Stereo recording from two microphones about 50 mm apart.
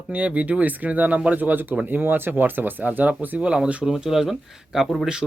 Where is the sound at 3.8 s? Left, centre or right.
Centre.